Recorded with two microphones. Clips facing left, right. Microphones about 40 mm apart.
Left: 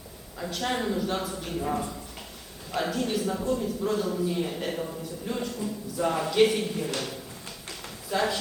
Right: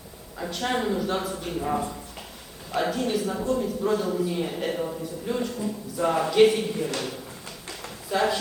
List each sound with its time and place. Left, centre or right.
0.3 s a man's voice: centre
8.1 s speech: centre